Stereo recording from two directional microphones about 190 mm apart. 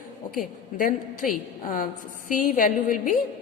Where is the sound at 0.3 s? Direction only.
45° left (ahead or behind).